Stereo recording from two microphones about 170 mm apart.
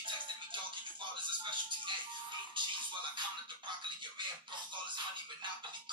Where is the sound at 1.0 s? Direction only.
30° right (ahead or behind).